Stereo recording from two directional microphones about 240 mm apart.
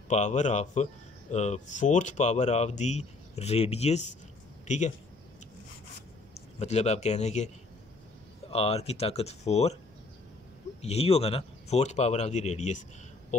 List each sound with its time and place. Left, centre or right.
0.1 s speech: left
6.6 s speech: left
10.8 s speech: left